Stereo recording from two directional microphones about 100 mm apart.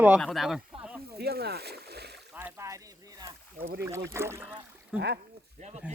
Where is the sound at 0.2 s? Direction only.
Centre (ahead or behind).